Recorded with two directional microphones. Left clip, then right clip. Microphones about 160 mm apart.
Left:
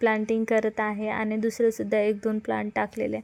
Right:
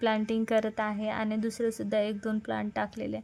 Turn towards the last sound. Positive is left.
turn(degrees=15)  # may be behind; listen again after turning